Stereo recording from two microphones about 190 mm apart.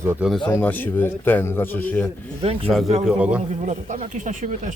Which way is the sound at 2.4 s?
30° right (ahead or behind).